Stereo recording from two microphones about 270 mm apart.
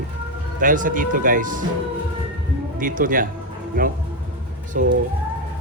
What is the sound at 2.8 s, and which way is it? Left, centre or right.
A man's voice, right.